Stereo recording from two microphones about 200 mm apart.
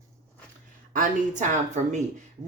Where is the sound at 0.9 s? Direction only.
40° right (ahead or behind).